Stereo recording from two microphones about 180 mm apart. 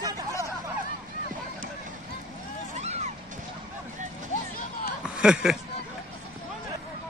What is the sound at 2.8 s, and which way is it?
Music, 35° right (ahead or behind).